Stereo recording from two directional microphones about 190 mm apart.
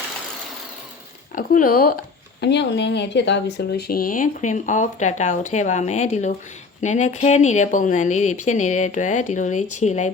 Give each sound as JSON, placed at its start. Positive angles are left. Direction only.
{"t": 1.4, "sound": "speech", "side_deg": 50}
{"t": 2.4, "sound": "speech", "side_deg": 65}